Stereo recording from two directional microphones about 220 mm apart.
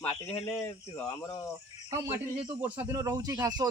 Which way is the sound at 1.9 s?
10° right (ahead or behind).